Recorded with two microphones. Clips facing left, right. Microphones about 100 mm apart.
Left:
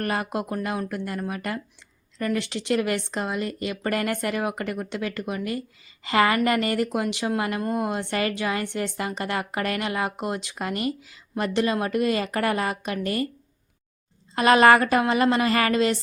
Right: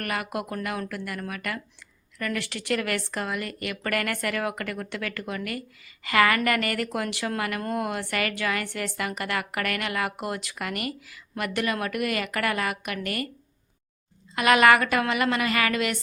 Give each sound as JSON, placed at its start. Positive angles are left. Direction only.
{"t": 0.0, "sound": "speech", "side_deg": 30}
{"t": 14.3, "sound": "a woman's voice", "side_deg": 30}